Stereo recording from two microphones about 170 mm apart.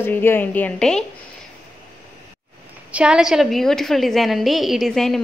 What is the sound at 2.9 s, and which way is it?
A woman's voice, 5° right (ahead or behind).